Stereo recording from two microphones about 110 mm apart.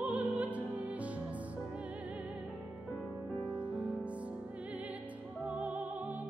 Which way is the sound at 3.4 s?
10° right (ahead or behind).